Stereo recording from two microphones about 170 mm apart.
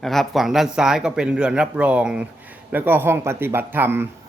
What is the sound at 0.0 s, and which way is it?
A man's voice, centre (ahead or behind).